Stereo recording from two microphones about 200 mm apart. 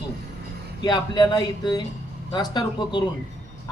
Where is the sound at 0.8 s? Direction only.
20° left (ahead or behind).